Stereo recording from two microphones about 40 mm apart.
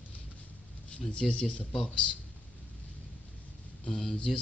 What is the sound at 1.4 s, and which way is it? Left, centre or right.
Speech, left.